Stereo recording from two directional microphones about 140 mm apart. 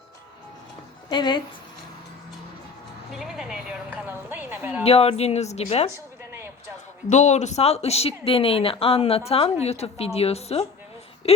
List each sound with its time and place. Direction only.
1.1 s a woman's voice: 35° left (ahead or behind)
3.1 s a woman's voice: 5° right (ahead or behind)
4.8 s speech: 45° left (ahead or behind)
7.1 s speech: 55° left (ahead or behind)